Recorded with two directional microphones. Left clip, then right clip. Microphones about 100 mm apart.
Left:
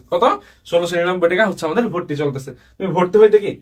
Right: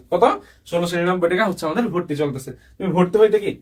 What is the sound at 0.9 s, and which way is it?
Speech, 65° left (ahead or behind).